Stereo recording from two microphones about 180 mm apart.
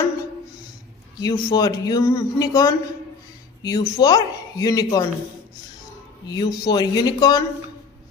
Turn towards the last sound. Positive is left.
turn(degrees=20)  # may be behind; listen again after turning